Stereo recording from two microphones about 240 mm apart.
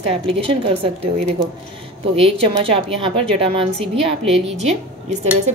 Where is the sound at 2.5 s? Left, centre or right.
Right.